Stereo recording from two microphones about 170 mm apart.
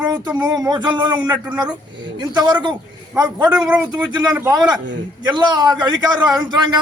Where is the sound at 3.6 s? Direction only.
10° right (ahead or behind).